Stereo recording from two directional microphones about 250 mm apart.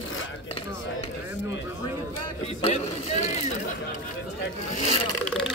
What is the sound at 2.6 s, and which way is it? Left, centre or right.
Vehicle, left.